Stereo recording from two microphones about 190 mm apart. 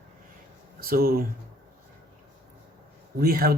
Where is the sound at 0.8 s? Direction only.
50° right (ahead or behind).